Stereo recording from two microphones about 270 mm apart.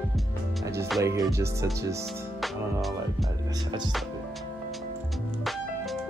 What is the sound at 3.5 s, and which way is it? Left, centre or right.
Speech, centre.